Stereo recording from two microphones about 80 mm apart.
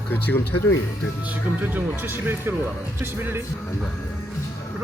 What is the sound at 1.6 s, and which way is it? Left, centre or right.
Speech, right.